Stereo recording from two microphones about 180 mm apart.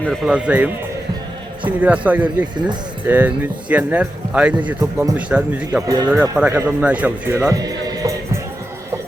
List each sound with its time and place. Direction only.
0.1 s speech: centre (ahead or behind)
1.8 s speech: 10° right (ahead or behind)
4.8 s speech: 20° right (ahead or behind)
5.8 s speech: 20° right (ahead or behind)